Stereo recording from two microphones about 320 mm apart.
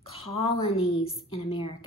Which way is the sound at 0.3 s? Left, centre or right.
Centre.